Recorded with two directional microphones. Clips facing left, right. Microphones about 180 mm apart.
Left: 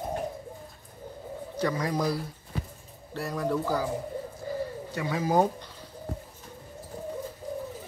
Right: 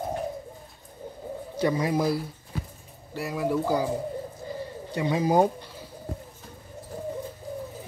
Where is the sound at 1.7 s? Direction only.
10° right (ahead or behind).